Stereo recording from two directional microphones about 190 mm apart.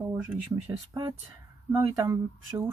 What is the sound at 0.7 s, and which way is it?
Speech, 20° right (ahead or behind).